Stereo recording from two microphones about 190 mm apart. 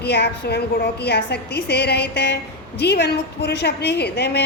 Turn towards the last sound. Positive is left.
turn(degrees=60)  # may be behind; listen again after turning